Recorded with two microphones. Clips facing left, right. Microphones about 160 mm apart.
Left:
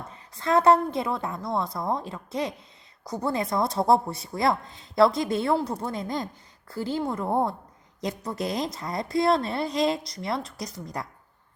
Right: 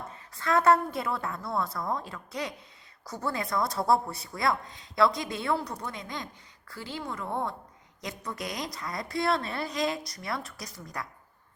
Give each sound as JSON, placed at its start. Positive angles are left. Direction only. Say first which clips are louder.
{"t": 0.3, "sound": "speech", "louder": "left 3 dB", "side_deg": 25}